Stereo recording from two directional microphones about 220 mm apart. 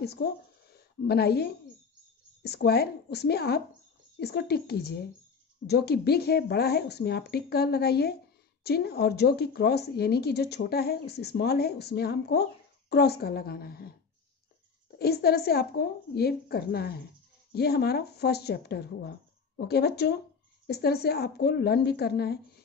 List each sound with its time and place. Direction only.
0.0 s a sound: 45° left (ahead or behind)
2.4 s a woman's voice: 45° left (ahead or behind)
15.0 s a woman's voice: 45° left (ahead or behind)